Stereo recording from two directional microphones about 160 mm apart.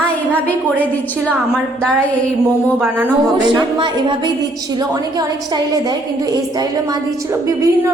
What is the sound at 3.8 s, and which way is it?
A woman's voice, 30° right (ahead or behind).